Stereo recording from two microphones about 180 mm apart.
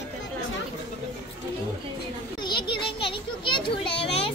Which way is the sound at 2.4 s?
25° left (ahead or behind).